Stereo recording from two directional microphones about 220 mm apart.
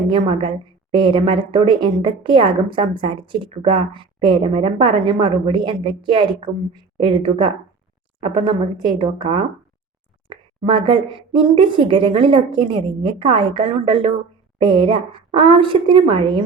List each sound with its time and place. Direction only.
0.1 s a woman's voice: 20° right (ahead or behind)